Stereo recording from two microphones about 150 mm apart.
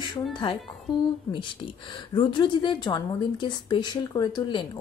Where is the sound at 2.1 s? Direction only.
35° left (ahead or behind).